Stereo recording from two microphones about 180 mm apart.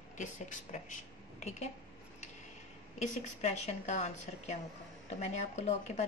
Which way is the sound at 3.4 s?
40° left (ahead or behind).